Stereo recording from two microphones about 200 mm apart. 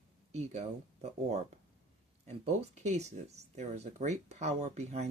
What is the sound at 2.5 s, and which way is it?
Speech, 35° right (ahead or behind).